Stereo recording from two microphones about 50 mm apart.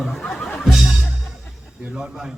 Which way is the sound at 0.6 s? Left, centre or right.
Centre.